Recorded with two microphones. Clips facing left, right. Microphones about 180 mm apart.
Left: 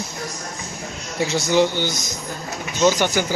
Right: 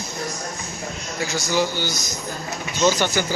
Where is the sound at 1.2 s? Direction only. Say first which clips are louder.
Left 5 dB; 25° left (ahead or behind).